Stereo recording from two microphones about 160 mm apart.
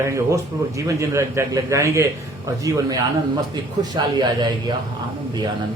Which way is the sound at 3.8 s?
25° right (ahead or behind).